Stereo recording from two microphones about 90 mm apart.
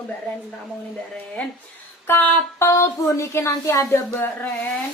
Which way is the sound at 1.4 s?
15° left (ahead or behind).